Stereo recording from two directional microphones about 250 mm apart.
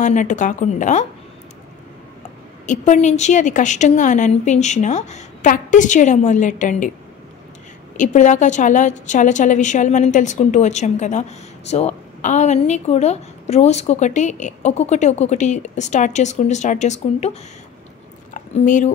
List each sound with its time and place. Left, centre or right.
0.0 s a woman's voice: left
2.6 s a woman's voice: left
8.0 s a woman's voice: left
18.3 s a sound: left